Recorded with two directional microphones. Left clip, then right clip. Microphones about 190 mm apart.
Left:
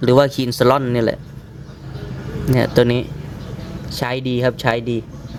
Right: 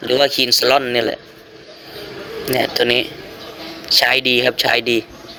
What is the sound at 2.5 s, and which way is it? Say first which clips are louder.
Speech: even; 15° left (ahead or behind).